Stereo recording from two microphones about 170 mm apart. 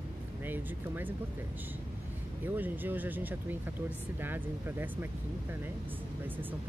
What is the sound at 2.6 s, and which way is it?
Speech, 10° right (ahead or behind).